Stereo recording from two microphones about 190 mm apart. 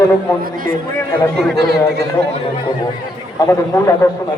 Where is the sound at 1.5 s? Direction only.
60° right (ahead or behind).